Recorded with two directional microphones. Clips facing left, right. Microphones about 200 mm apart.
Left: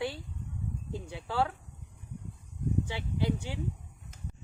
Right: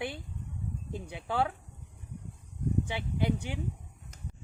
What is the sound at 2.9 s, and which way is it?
Speech, 20° right (ahead or behind).